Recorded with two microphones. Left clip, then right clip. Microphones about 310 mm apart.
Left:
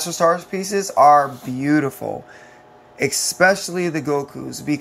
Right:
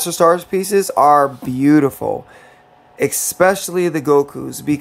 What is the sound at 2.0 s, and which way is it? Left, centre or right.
Speech, right.